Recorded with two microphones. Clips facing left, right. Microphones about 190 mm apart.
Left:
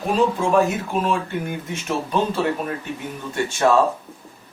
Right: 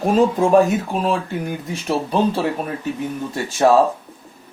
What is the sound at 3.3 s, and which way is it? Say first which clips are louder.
Speech: right 3 dB; 35° right (ahead or behind).